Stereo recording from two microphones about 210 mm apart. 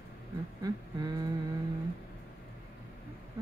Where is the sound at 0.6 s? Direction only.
15° right (ahead or behind).